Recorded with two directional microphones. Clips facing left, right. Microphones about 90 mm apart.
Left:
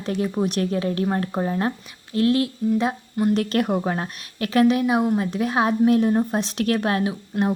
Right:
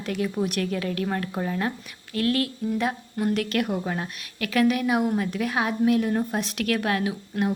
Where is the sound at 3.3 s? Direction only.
35° left (ahead or behind).